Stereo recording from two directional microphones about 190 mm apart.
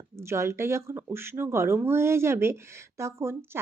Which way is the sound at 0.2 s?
15° right (ahead or behind).